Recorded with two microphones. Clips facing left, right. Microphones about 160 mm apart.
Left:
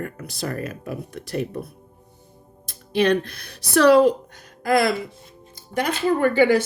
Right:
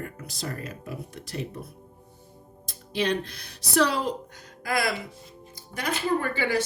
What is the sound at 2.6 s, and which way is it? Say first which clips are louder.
Speech: left 7 dB; 60° left (ahead or behind).